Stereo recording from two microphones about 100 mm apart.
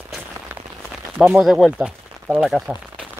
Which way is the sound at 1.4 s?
Centre (ahead or behind).